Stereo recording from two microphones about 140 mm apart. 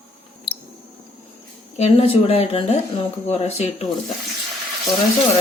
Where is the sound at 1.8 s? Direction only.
45° left (ahead or behind).